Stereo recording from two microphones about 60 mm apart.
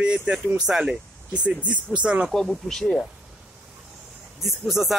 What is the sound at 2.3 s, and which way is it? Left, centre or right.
Speech, centre.